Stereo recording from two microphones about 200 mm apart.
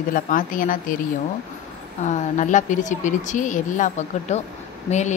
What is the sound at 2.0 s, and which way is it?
A woman's voice, 35° left (ahead or behind).